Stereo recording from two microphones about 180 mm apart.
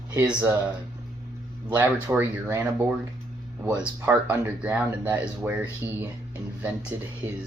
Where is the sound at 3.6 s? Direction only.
10° right (ahead or behind).